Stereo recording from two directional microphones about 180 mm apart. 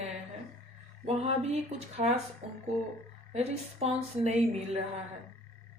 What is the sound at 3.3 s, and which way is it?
Speech, 35° right (ahead or behind).